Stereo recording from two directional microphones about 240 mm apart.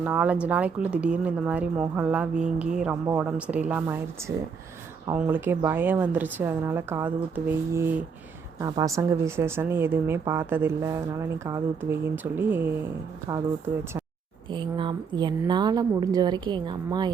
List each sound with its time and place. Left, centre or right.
0.0 s speech: centre
14.5 s speech: centre